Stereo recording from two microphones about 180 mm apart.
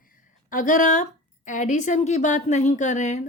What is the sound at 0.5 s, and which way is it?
A woman's voice, 45° left (ahead or behind).